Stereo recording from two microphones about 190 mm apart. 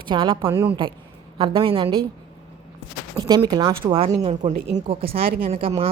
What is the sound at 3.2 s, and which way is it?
A woman's voice, 20° right (ahead or behind).